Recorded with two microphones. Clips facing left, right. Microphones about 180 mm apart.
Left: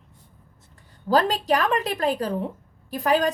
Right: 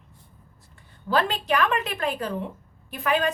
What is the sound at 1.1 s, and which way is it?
Speech, 35° left (ahead or behind).